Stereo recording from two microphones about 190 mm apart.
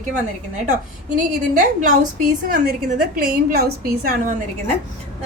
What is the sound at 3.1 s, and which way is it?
A woman's voice, 50° right (ahead or behind).